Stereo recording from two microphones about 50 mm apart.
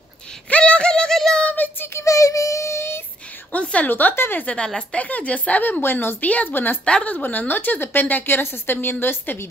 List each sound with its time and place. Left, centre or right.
0.5 s a sound: left
1.1 s child singing: centre
1.5 s child singing: left
2.0 s child singing: left
3.5 s a sound: left
3.9 s a woman's voice: left
4.4 s speech: left
6.2 s speech: left
6.5 s speech: left
6.8 s speech: centre
7.1 s a woman's voice: left